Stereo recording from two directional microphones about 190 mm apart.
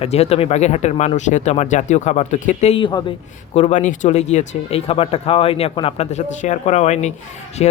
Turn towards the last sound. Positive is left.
turn(degrees=35)  # may be behind; listen again after turning